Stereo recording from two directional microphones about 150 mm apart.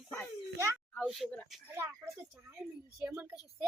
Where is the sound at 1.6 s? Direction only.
15° right (ahead or behind).